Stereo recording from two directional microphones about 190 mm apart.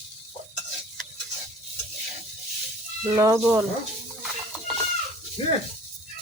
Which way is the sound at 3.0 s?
15° right (ahead or behind).